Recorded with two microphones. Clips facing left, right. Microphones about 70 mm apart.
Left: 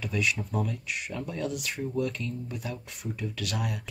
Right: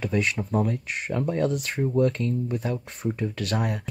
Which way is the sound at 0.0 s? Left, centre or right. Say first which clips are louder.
Right 4 dB; right.